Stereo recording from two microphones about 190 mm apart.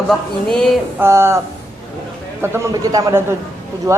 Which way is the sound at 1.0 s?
15° right (ahead or behind).